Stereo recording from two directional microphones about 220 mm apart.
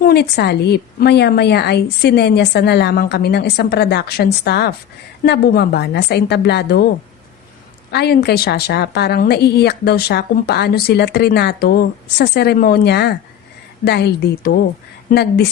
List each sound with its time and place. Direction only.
0.0 s speech: 45° left (ahead or behind)
7.9 s speech: 45° left (ahead or behind)